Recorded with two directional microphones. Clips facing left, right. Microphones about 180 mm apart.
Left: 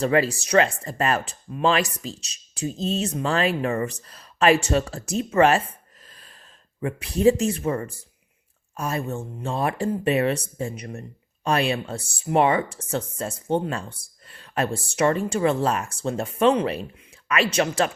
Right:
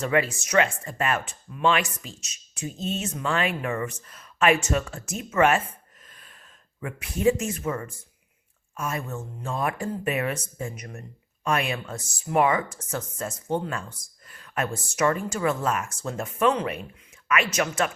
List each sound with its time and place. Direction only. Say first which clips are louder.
0.0 s speech: left 3 dB; 35° left (ahead or behind)
6.1 s gasp: left 2 dB; 35° left (ahead or behind)
6.7 s speech: left 6 dB; 30° left (ahead or behind)